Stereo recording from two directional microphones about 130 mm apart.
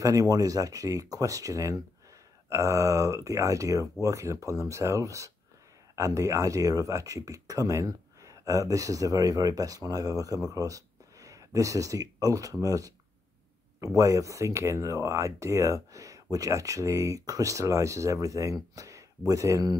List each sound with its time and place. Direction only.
0.0 s speech: 25° right (ahead or behind)
13.9 s speech: 25° right (ahead or behind)